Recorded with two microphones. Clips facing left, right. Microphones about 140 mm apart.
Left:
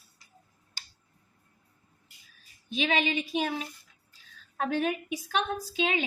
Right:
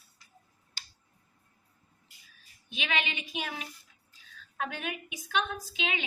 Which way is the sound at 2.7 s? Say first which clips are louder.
Left 6 dB; 35° left (ahead or behind).